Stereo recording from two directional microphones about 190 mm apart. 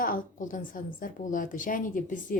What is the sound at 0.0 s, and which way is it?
A woman's voice, 45° left (ahead or behind).